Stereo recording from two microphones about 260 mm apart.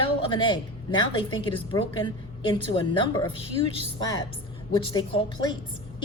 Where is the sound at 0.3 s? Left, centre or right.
Centre.